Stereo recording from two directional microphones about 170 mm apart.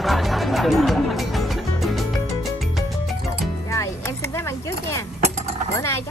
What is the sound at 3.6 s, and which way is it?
Music, 15° left (ahead or behind).